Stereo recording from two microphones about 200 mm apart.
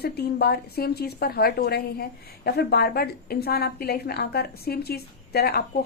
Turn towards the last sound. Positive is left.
turn(degrees=50)  # may be behind; listen again after turning